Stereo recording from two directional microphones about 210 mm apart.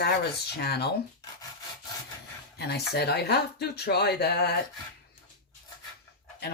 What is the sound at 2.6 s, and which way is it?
Speech, 50° left (ahead or behind).